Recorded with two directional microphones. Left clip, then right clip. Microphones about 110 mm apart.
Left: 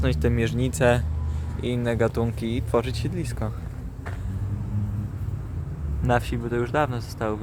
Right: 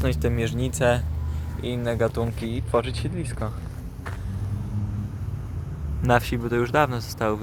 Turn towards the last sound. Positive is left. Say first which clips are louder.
# right 3 dB
turn(degrees=-15)  # may be behind; listen again after turning